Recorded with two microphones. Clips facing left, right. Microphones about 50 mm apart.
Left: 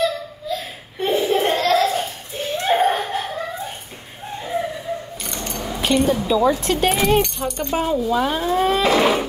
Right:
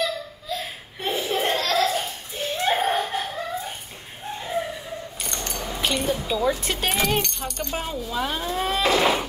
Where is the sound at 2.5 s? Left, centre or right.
Centre.